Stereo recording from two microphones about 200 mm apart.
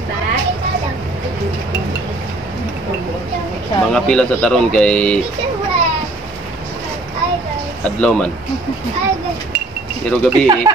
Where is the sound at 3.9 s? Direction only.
5° left (ahead or behind).